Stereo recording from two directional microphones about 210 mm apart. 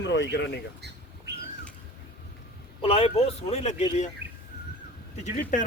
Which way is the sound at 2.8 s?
30° left (ahead or behind).